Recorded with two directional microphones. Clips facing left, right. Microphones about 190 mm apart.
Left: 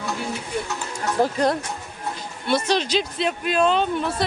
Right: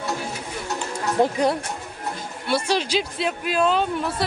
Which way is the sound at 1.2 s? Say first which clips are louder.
Right 1 dB; 20° right (ahead or behind).